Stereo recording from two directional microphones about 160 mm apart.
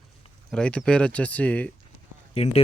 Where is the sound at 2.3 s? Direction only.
40° left (ahead or behind).